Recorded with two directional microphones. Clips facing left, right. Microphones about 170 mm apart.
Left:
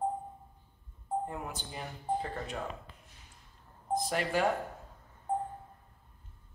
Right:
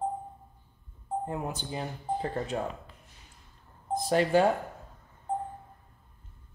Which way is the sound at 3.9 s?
30° right (ahead or behind).